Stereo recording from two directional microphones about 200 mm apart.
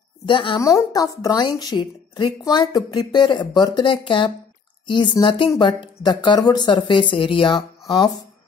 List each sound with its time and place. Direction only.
0.3 s speech: 25° left (ahead or behind)